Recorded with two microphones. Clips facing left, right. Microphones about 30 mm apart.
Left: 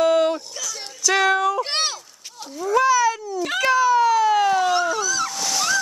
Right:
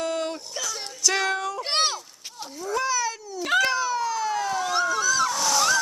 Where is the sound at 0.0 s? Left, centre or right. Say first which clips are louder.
Left 10 dB; left.